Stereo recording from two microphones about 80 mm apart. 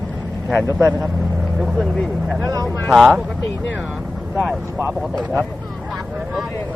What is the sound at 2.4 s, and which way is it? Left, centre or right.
Speech, right.